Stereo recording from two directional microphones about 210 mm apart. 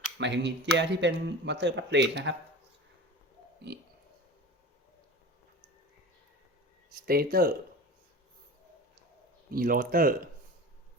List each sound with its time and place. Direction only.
0.2 s speech: 55° right (ahead or behind)
7.0 s speech: 45° right (ahead or behind)
9.5 s speech: 45° right (ahead or behind)